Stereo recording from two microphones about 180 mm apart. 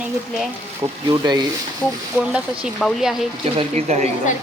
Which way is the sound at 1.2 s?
25° right (ahead or behind).